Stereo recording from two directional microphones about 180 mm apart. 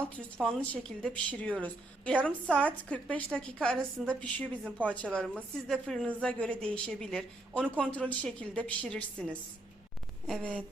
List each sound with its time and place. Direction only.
0.3 s a woman's voice: 5° left (ahead or behind)